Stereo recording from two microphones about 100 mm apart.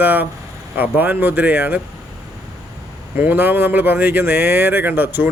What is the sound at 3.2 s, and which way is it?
Speech, 20° right (ahead or behind).